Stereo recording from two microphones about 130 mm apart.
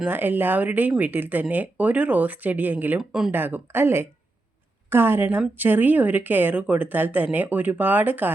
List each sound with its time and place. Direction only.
0.0 s speech: 15° right (ahead or behind)
3.0 s speech: 5° right (ahead or behind)
3.3 s speech: 15° right (ahead or behind)